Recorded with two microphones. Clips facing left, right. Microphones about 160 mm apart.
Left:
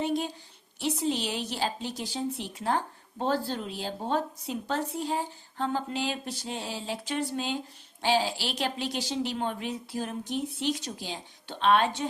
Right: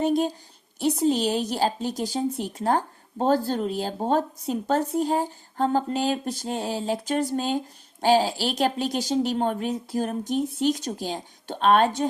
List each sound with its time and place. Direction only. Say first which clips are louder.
0.0 s a woman's voice: right 7 dB; 45° right (ahead or behind)